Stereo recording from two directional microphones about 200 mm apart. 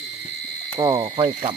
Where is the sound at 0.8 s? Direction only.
20° right (ahead or behind).